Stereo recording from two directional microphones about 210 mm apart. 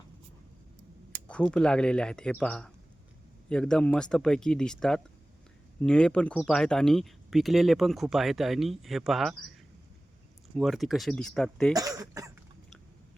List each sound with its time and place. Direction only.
1.3 s speech: 5° left (ahead or behind)
10.5 s speech: centre (ahead or behind)
11.7 s speech: 15° right (ahead or behind)